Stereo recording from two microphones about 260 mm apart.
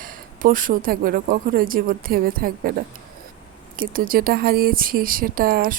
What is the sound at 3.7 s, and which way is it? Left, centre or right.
Speech, right.